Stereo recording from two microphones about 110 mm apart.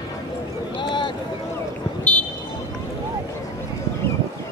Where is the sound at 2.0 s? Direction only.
10° left (ahead or behind).